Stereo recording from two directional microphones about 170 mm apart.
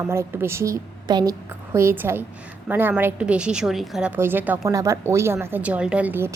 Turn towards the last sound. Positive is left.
turn(degrees=-10)  # may be behind; listen again after turning